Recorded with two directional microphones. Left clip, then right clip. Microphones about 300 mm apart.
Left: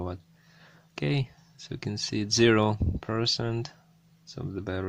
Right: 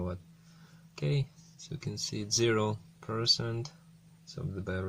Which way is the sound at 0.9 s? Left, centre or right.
Left.